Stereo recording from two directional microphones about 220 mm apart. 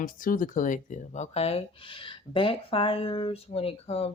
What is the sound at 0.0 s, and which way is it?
Speech, 40° left (ahead or behind).